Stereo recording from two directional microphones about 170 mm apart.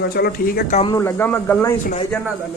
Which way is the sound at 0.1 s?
65° left (ahead or behind).